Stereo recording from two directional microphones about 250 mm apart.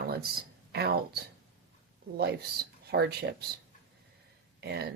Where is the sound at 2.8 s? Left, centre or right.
Right.